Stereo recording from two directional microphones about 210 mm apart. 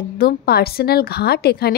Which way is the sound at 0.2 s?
50° left (ahead or behind).